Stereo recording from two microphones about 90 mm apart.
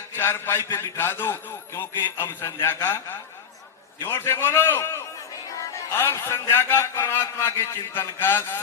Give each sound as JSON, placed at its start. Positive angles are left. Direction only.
{"t": 0.1, "sound": "a man's voice", "side_deg": 25}